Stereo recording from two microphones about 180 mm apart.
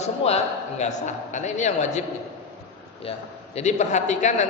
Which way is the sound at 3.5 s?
40° left (ahead or behind).